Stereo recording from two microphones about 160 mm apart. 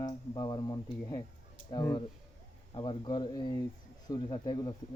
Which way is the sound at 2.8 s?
30° left (ahead or behind).